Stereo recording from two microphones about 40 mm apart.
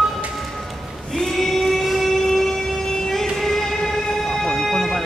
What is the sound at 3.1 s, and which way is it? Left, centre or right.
Music, centre.